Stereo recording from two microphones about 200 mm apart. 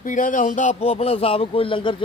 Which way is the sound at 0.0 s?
40° left (ahead or behind).